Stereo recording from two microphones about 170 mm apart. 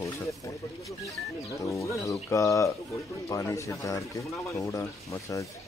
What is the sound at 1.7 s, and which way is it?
Speech, 15° left (ahead or behind).